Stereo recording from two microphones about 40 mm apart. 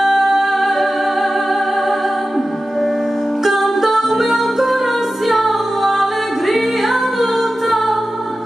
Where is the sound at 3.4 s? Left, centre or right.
Centre.